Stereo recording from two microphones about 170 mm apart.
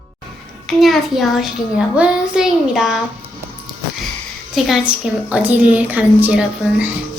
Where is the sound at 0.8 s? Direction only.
Centre (ahead or behind).